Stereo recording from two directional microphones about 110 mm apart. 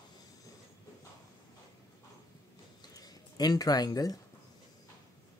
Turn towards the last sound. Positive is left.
turn(degrees=35)  # may be behind; listen again after turning